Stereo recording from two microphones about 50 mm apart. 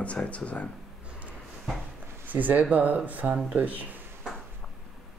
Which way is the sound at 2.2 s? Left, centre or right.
Right.